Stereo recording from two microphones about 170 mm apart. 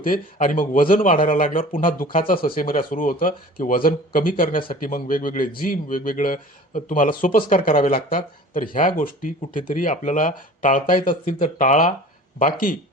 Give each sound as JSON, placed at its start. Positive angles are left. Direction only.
{"t": 0.0, "sound": "speech", "side_deg": 55}